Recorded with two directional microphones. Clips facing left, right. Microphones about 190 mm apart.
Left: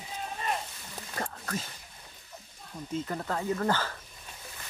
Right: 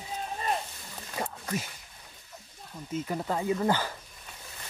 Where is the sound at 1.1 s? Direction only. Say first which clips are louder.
Right 2 dB; 10° right (ahead or behind).